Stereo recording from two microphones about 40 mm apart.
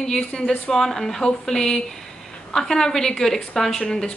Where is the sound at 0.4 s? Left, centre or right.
Centre.